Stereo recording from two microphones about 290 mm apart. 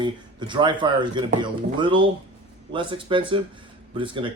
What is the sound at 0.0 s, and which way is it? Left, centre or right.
A man's voice, centre.